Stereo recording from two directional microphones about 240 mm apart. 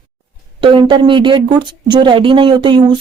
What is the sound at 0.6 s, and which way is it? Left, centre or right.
A woman's voice, right.